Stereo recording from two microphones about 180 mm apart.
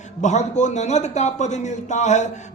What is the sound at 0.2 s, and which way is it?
A man's voice, 40° left (ahead or behind).